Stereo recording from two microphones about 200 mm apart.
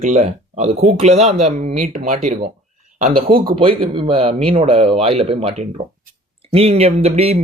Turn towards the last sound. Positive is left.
turn(degrees=-30)  # may be behind; listen again after turning